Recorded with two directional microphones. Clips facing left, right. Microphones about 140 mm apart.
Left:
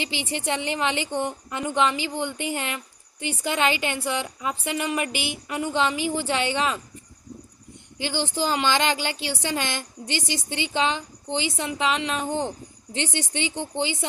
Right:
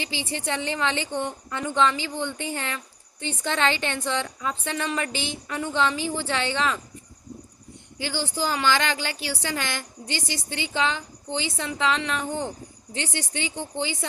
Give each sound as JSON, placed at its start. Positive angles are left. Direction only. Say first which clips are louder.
{"t": 0.0, "sound": "a woman's voice", "louder": "left 2 dB", "side_deg": 20}
{"t": 7.9, "sound": "speech", "louder": "left 2 dB", "side_deg": 20}